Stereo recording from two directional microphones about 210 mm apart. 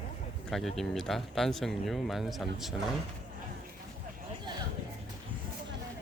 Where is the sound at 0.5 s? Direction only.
Centre (ahead or behind).